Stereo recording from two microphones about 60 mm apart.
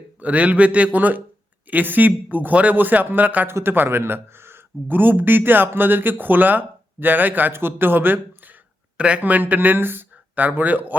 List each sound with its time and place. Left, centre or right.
0.2 s speech: right
9.0 s speech: right